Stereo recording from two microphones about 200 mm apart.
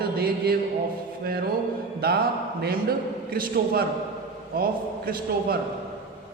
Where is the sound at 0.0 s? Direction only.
50° right (ahead or behind).